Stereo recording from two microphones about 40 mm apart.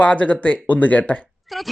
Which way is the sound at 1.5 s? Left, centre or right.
Centre.